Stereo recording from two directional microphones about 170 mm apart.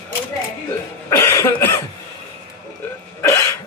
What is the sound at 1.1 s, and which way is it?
Cough, 15° left (ahead or behind).